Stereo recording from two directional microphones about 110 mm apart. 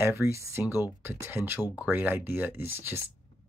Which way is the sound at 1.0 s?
20° right (ahead or behind).